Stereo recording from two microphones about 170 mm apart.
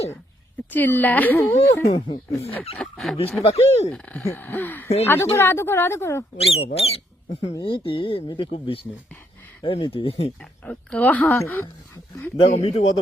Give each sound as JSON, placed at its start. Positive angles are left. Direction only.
{"t": 0.7, "sound": "speech", "side_deg": 10}
{"t": 2.7, "sound": "speech", "side_deg": 0}
{"t": 3.4, "sound": "speech", "side_deg": 40}
{"t": 3.8, "sound": "speech", "side_deg": 5}
{"t": 6.3, "sound": "speech", "side_deg": 35}
{"t": 10.7, "sound": "speech", "side_deg": 10}
{"t": 12.4, "sound": "speech", "side_deg": 40}